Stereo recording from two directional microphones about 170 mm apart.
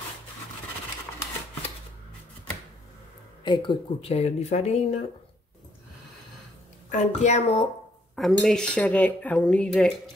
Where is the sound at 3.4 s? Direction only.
25° left (ahead or behind).